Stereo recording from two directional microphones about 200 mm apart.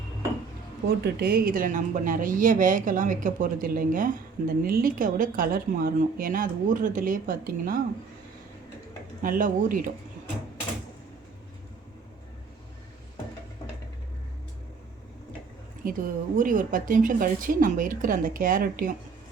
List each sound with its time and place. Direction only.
1.0 s speech: 50° right (ahead or behind)
9.2 s speech: 45° right (ahead or behind)
15.8 s speech: 45° right (ahead or behind)